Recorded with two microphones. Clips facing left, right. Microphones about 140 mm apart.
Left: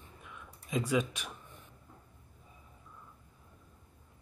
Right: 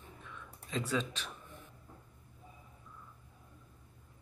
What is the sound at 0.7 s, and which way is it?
Speech, 10° left (ahead or behind).